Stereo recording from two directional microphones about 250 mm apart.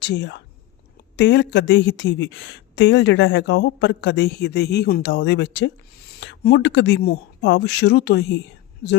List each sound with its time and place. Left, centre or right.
0.0 s a woman's voice: left